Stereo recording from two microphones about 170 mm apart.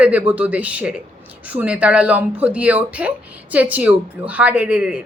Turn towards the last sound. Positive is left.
turn(degrees=-5)  # may be behind; listen again after turning